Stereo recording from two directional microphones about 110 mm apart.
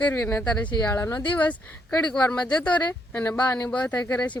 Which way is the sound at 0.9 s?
25° left (ahead or behind).